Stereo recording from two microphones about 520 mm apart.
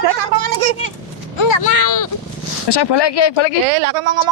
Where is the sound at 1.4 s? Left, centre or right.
Left.